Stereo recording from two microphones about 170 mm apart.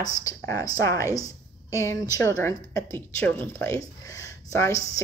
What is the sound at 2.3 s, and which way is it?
Speech, 15° left (ahead or behind).